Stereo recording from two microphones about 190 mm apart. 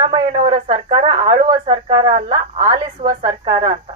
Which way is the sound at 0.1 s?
30° right (ahead or behind).